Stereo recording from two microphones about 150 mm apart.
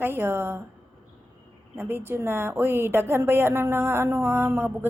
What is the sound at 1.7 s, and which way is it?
A woman's voice, 15° right (ahead or behind).